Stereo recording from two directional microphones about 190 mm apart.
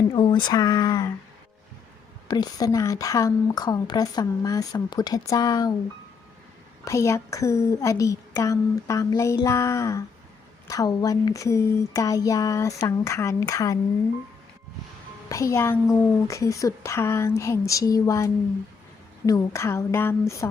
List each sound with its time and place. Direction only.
0.1 s speech: 25° left (ahead or behind)
2.2 s speech: 20° left (ahead or behind)
6.8 s a woman's voice: 15° left (ahead or behind)
15.3 s a woman's voice: 15° left (ahead or behind)